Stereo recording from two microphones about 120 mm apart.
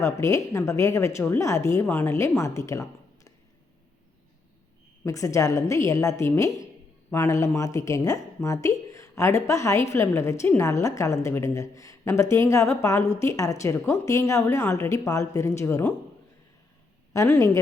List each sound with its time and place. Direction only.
0.0 s a woman's voice: 25° left (ahead or behind)
5.0 s a woman's voice: 25° left (ahead or behind)
17.2 s a woman's voice: 25° left (ahead or behind)